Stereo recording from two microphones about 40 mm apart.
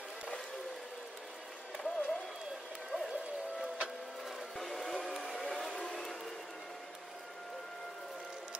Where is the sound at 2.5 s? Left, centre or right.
Centre.